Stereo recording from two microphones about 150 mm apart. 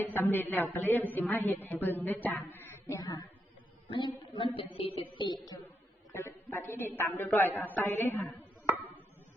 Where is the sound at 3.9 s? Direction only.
35° left (ahead or behind).